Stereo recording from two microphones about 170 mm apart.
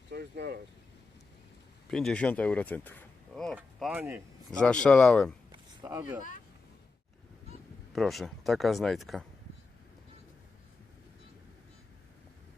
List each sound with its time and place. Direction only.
0.1 s a sound: 70° right (ahead or behind)
1.9 s speech: 5° left (ahead or behind)
3.5 s speech: 5° right (ahead or behind)
4.6 s speech: 5° left (ahead or behind)
5.5 s a sound: 20° right (ahead or behind)
7.9 s speech: centre (ahead or behind)